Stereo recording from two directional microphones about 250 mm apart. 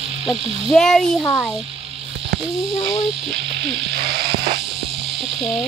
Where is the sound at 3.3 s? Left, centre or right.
Right.